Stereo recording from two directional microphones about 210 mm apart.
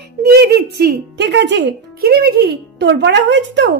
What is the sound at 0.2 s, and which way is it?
Speech, 50° right (ahead or behind).